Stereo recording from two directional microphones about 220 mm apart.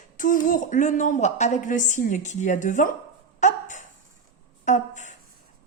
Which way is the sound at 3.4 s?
35° left (ahead or behind).